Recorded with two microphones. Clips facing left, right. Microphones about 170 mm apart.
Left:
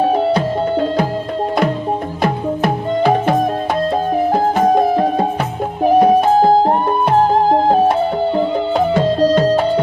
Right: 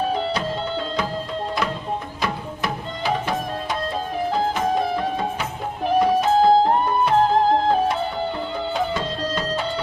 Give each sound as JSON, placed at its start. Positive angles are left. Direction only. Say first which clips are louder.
{"t": 0.0, "sound": "music", "louder": "left 9 dB", "side_deg": 45}
{"t": 2.2, "sound": "music", "louder": "left 12 dB", "side_deg": 55}
{"t": 8.4, "sound": "music", "louder": "left 9 dB", "side_deg": 50}